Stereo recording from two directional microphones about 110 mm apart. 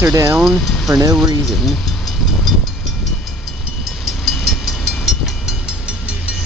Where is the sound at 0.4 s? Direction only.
Centre (ahead or behind).